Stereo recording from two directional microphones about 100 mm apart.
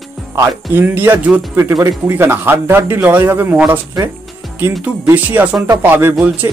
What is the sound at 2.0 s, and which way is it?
Speech, 20° right (ahead or behind).